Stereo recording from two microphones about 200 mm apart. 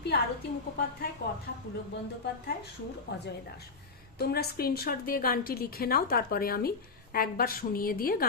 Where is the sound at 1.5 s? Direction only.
50° left (ahead or behind).